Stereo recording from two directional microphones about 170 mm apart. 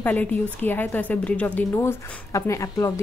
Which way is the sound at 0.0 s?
10° left (ahead or behind).